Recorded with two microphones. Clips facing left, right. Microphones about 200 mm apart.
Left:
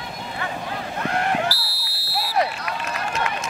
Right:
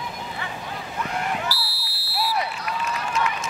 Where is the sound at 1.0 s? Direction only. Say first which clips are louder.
Left 5 dB; 65° left (ahead or behind).